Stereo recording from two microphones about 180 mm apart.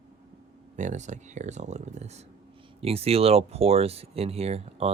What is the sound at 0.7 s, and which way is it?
Speech, 40° right (ahead or behind).